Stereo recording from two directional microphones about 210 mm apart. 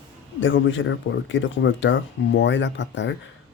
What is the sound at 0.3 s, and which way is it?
Speech, 65° left (ahead or behind).